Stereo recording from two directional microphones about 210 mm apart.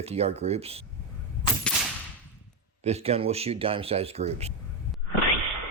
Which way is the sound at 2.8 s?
30° right (ahead or behind).